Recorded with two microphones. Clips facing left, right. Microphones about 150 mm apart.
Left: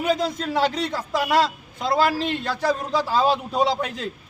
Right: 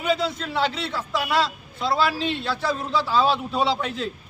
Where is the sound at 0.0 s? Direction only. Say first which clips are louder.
Left 1 dB; 40° left (ahead or behind).